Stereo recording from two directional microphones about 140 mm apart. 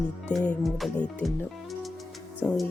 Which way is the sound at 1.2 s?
10° left (ahead or behind).